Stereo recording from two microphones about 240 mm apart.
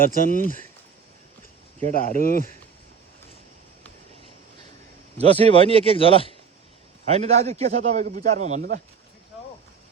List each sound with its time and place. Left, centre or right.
0.0 s speech: left
1.9 s speech: left
5.2 s a man's voice: right
5.7 s speech: left
7.0 s a man's voice: right